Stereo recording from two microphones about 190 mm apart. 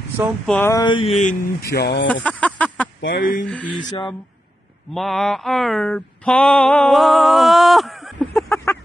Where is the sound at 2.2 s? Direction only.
5° left (ahead or behind).